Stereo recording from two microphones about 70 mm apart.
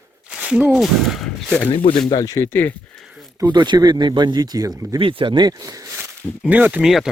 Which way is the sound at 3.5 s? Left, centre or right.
Right.